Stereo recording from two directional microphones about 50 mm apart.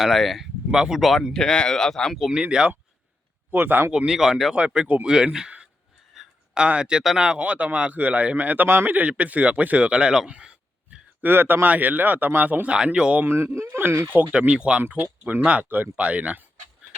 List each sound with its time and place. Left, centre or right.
0.0 s speech: centre
1.3 s speech: centre
2.3 s speech: centre
3.5 s speech: right
3.9 s speech: centre
4.5 s a man's voice: right
6.2 s a sound: centre
6.5 s a man's voice: centre
11.2 s speech: right
12.7 s a man's voice: centre
13.2 s speech: right
14.3 s a man's voice: right
14.8 s a man's voice: right